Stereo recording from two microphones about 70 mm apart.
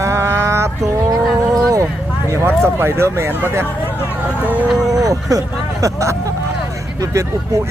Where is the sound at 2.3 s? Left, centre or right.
Right.